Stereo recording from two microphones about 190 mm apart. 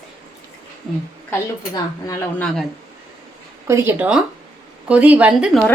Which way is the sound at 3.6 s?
15° right (ahead or behind).